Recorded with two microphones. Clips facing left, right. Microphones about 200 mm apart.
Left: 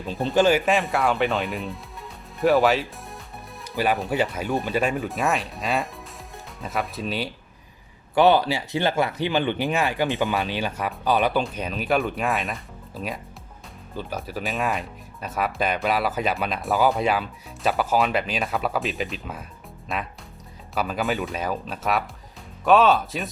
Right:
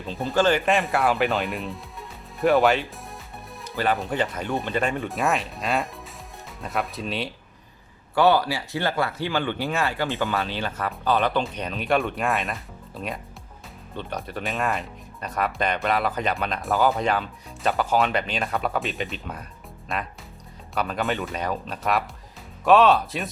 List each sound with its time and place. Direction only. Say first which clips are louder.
0.3 s speech: left 1 dB; 10° left (ahead or behind)
3.6 s music: left 1 dB; 10° left (ahead or behind)
3.9 s speech: left 2 dB; 5° left (ahead or behind)
8.1 s speech: left 2 dB; 20° left (ahead or behind); by 23.3 s centre (ahead or behind)